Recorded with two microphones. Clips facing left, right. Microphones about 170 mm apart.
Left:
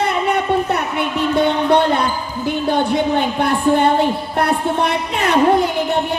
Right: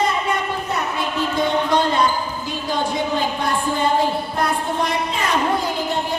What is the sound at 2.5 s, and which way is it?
A woman's voice, 60° left (ahead or behind).